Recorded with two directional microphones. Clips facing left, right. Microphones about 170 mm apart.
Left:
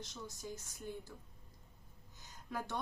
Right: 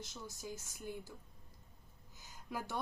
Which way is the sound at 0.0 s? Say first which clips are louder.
Even; 5° right (ahead or behind).